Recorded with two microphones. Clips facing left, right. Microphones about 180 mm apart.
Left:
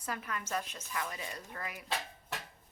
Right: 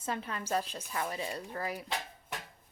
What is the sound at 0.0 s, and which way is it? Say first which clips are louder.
A woman's voice: right 3 dB; 25° right (ahead or behind).